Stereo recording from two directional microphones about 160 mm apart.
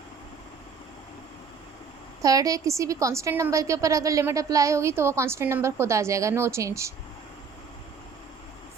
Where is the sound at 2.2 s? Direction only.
20° right (ahead or behind).